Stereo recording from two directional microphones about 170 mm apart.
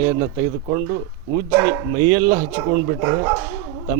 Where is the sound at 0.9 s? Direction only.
35° right (ahead or behind).